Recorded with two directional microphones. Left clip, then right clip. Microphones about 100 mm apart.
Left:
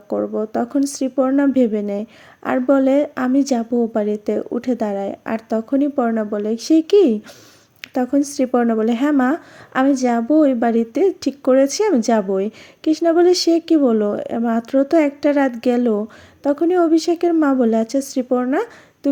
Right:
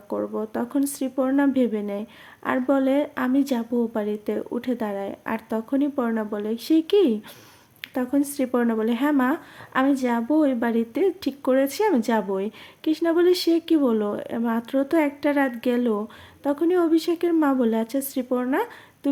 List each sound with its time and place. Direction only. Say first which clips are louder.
0.1 s a woman's voice: left 7 dB; 35° left (ahead or behind)
7.8 s a sound: left 6 dB; 35° left (ahead or behind)
8.3 s a woman's voice: left 6 dB; 35° left (ahead or behind)